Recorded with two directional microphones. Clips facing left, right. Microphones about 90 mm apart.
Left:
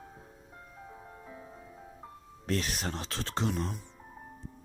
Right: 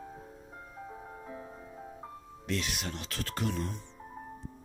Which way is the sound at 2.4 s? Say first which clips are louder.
Left 2 dB; 40° left (ahead or behind).